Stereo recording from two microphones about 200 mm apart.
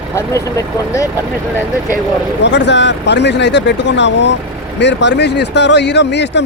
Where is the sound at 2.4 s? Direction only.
60° left (ahead or behind).